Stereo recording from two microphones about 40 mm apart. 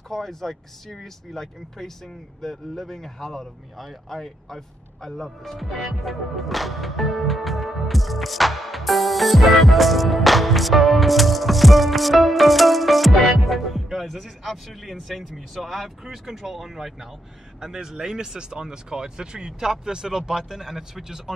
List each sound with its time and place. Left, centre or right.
0.1 s speech: centre